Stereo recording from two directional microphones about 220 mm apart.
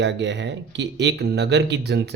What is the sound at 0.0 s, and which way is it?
Speech, 55° right (ahead or behind).